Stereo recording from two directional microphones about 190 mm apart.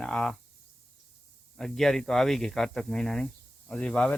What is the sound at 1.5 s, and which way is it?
Speech, centre (ahead or behind).